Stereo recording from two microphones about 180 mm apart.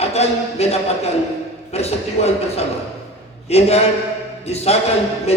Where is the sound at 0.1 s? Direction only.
35° left (ahead or behind).